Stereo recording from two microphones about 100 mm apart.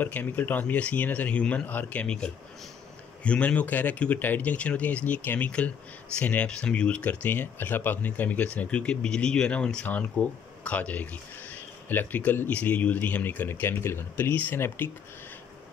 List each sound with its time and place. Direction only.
0.0 s speech: 20° left (ahead or behind)